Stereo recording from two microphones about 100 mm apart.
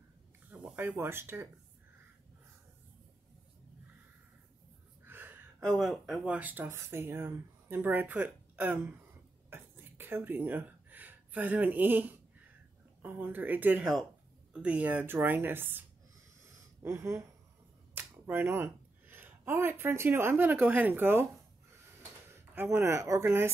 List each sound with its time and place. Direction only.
0.7 s speech: 20° right (ahead or behind)
5.0 s a sound: 20° right (ahead or behind)
5.7 s speech: centre (ahead or behind)
6.2 s speech: 15° right (ahead or behind)
9.5 s a sound: 20° right (ahead or behind)
13.0 s speech: 15° right (ahead or behind)
16.8 s speech: 25° right (ahead or behind)
22.3 s speech: 25° right (ahead or behind)